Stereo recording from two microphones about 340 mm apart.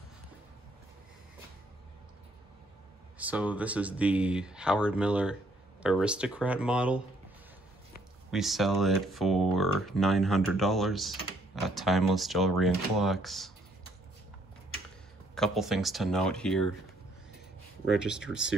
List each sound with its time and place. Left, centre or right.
3.2 s speech: centre
8.3 s speech: centre
15.3 s speech: centre
17.8 s speech: centre